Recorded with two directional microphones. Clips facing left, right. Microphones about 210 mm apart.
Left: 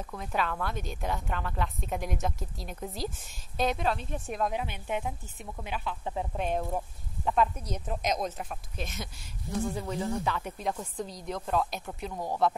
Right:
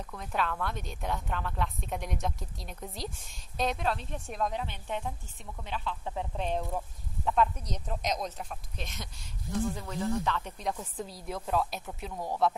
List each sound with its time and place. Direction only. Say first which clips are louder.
0.1 s a woman's voice: left 1 dB; 5° left (ahead or behind)